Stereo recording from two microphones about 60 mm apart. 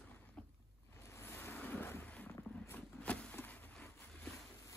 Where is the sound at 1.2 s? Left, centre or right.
Left.